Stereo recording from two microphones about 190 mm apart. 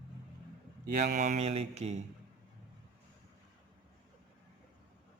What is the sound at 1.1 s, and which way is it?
Speech, 40° right (ahead or behind).